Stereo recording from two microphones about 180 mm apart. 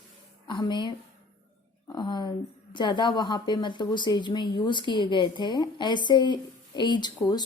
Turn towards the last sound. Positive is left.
turn(degrees=20)  # may be behind; listen again after turning